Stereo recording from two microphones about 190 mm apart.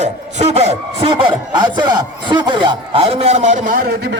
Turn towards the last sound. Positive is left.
turn(degrees=-50)  # may be behind; listen again after turning